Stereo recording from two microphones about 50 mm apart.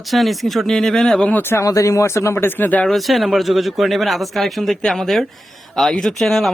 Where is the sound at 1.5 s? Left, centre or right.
Left.